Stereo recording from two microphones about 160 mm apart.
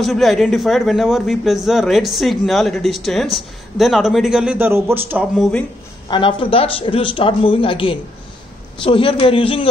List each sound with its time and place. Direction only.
0.0 s a man's voice: centre (ahead or behind)
6.0 s speech: 30° left (ahead or behind)